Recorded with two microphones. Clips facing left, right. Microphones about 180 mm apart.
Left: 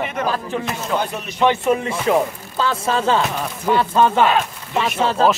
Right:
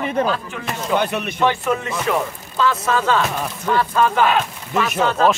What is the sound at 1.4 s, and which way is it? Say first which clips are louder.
Speech: left 3 dB; 25° left (ahead or behind).